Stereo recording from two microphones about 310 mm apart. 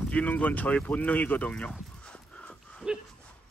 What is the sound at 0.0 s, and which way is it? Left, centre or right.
Speech, centre.